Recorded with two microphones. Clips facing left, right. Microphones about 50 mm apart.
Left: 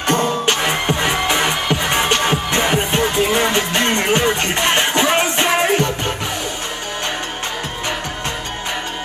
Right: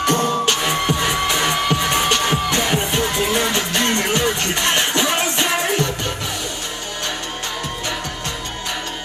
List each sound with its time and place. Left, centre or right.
0.0 s music: left